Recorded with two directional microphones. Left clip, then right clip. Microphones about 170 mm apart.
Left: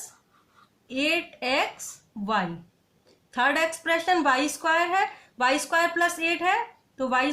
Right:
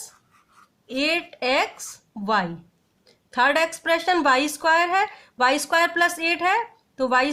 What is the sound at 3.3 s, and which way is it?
Speech, 40° right (ahead or behind).